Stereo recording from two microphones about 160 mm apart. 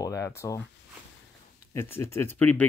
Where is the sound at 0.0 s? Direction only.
20° left (ahead or behind).